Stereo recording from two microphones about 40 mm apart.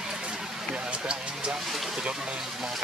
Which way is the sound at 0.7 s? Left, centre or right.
Right.